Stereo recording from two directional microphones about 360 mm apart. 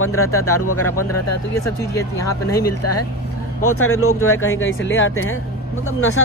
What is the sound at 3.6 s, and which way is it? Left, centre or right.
Speech, left.